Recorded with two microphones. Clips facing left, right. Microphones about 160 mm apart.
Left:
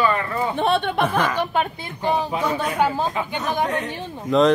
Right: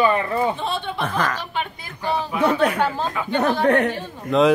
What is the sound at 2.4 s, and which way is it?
Speech, 65° right (ahead or behind).